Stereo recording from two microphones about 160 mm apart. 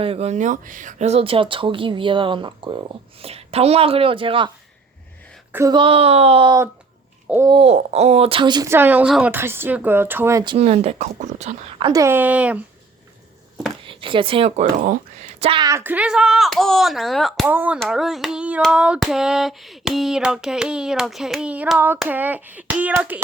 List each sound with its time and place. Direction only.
0.0 s speech: 40° right (ahead or behind)
5.5 s speech: 15° right (ahead or behind)
5.7 s speech: 35° right (ahead or behind)
8.7 s speech: 10° right (ahead or behind)
10.4 s speech: 30° right (ahead or behind)
10.7 s speech: 45° right (ahead or behind)
11.9 s speech: 20° right (ahead or behind)
13.8 s speech: 30° right (ahead or behind)
14.6 s speech: 55° right (ahead or behind); by 15.6 s 40° right (ahead or behind)
15.6 s a sound: 15° right (ahead or behind); by 17.4 s centre (ahead or behind)
17.4 s speech: 10° right (ahead or behind)
17.7 s a sound: centre (ahead or behind)
21.9 s speech: 10° right (ahead or behind)